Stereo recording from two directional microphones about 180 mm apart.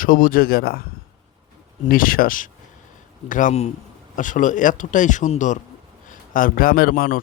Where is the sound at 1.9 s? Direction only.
50° left (ahead or behind).